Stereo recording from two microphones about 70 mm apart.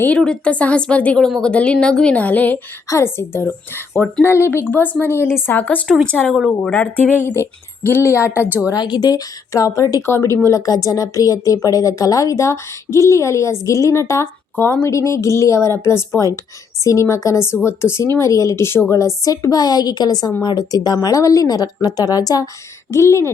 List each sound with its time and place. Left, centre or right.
0.1 s speech: centre
2.8 s a woman's voice: left
5.5 s speech: left
7.2 s a woman's voice: left
8.7 s a woman's voice: left
9.5 s a woman's voice: left
10.1 s a woman's voice: left
10.7 s a woman's voice: left
18.9 s a woman's voice: left
20.4 s a woman's voice: left
21.2 s a woman's voice: left
22.9 s a woman's voice: left